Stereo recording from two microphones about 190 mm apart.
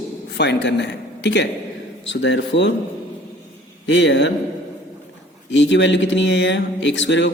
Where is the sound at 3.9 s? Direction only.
70° left (ahead or behind).